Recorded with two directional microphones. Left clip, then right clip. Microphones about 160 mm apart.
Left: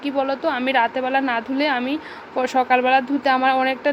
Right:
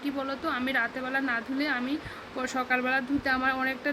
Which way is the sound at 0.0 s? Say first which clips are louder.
Left 10 dB; 15° left (ahead or behind).